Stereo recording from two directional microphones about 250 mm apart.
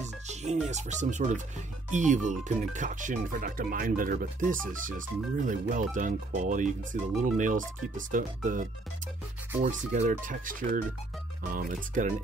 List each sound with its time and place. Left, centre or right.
0.0 s music: right
0.7 s speech: right